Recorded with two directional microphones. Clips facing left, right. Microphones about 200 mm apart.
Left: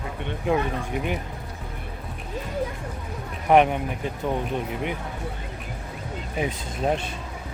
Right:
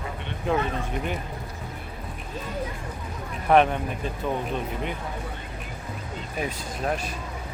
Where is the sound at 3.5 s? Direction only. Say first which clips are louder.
Left 1 dB; 15° left (ahead or behind).